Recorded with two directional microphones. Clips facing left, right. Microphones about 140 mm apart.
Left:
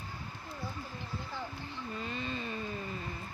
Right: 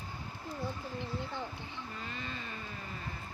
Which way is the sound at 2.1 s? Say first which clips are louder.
Left 5 dB; 20° left (ahead or behind).